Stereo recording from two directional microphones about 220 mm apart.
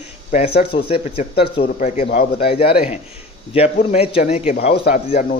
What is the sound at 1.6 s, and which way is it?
A man's voice, 35° left (ahead or behind).